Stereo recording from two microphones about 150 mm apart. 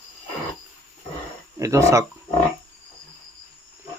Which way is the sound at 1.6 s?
20° right (ahead or behind).